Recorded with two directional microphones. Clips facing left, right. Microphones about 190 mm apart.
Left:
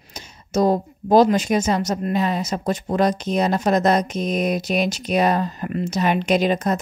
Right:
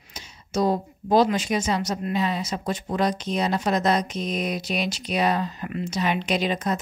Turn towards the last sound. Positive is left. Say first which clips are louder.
# left 5 dB
turn(degrees=45)  # may be behind; listen again after turning